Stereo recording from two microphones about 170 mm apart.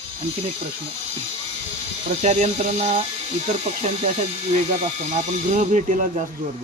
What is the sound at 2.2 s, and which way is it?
Speech, 40° right (ahead or behind).